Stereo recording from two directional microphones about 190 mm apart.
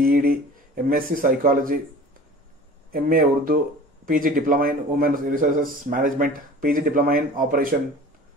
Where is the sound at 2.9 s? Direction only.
50° right (ahead or behind).